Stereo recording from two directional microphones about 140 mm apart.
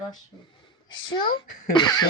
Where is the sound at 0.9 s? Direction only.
35° left (ahead or behind).